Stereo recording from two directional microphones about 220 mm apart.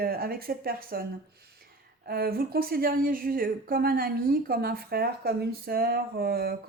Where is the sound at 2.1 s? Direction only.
45° right (ahead or behind).